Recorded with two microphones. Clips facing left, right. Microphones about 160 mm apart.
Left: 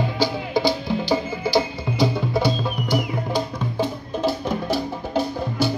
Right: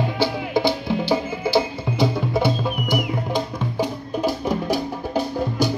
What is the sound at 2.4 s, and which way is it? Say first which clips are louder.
Music: right 1 dB; 20° right (ahead or behind).